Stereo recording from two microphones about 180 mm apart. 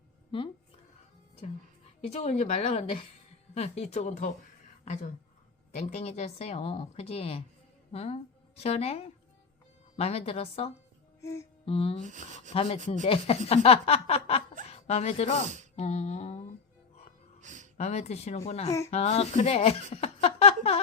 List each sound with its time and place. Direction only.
0.3 s speech: 30° left (ahead or behind)
2.0 s speech: 35° left (ahead or behind)
5.7 s speech: 35° left (ahead or behind)
11.2 s music: 15° left (ahead or behind)
11.6 s speech: 30° left (ahead or behind)
15.7 s a sound: 35° left (ahead or behind)
17.4 s a sound: 45° right (ahead or behind)
17.7 s speech: 40° left (ahead or behind)